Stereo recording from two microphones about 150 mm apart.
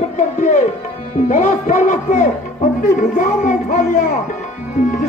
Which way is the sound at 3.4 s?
60° left (ahead or behind).